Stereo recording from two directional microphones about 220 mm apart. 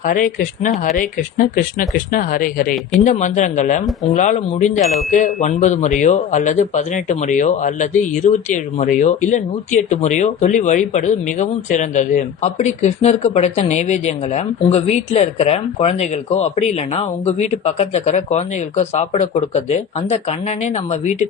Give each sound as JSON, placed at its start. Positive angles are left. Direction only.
{"t": 0.0, "sound": "speech", "side_deg": 40}